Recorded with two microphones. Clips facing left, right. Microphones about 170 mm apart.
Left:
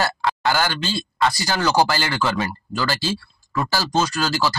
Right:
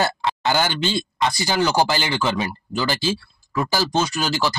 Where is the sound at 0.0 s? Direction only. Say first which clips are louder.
Even; 20° right (ahead or behind).